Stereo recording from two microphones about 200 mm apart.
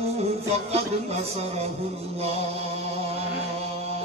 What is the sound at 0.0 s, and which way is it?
Music, 30° right (ahead or behind).